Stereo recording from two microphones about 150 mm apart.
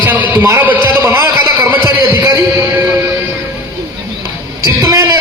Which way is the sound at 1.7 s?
15° right (ahead or behind).